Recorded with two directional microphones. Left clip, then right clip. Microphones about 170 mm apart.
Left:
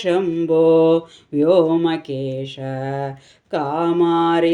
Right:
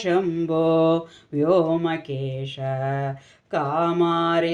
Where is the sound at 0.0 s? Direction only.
20° left (ahead or behind).